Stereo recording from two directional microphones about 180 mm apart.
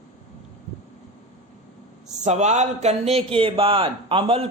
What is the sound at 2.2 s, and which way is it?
A man's voice, 40° right (ahead or behind).